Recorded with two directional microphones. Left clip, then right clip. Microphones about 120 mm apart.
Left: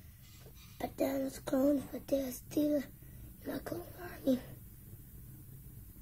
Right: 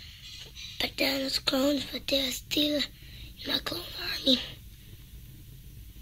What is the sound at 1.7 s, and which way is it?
A child's voice, 20° right (ahead or behind).